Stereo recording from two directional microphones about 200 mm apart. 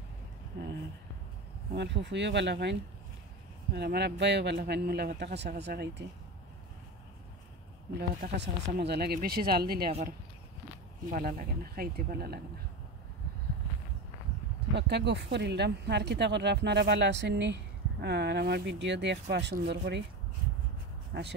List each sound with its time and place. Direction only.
0.5 s a sound: 55° right (ahead or behind)
1.7 s speech: 60° right (ahead or behind)
8.2 s speech: 45° right (ahead or behind)
11.1 s speech: 45° right (ahead or behind)
14.7 s speech: 60° right (ahead or behind)
21.1 s speech: 55° right (ahead or behind)